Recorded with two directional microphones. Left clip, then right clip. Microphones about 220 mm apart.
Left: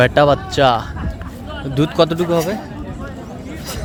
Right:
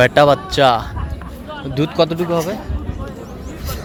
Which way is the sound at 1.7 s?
10° left (ahead or behind).